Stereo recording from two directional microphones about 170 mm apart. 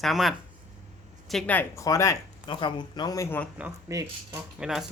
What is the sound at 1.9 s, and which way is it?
Speech, 20° left (ahead or behind).